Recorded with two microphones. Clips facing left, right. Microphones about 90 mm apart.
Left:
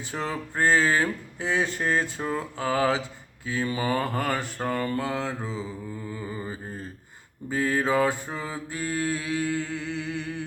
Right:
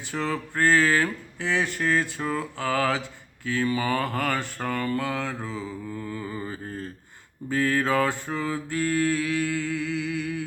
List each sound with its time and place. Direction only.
0.1 s mantra: 25° left (ahead or behind)